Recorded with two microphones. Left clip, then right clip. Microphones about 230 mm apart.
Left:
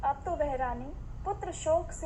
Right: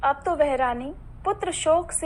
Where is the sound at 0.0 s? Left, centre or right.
Right.